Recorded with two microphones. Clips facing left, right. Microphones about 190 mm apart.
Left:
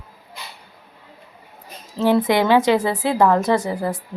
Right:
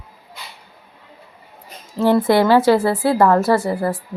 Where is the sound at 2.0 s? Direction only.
15° left (ahead or behind).